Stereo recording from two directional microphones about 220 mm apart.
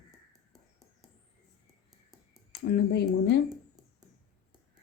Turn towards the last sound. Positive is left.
turn(degrees=50)  # may be behind; listen again after turning